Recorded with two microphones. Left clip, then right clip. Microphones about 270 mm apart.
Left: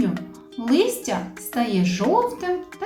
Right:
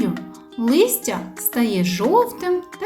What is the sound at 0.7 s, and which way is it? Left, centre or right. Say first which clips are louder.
A woman's voice: right 3 dB; right.